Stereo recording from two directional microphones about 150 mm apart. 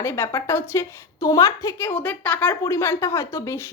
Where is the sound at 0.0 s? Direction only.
15° left (ahead or behind).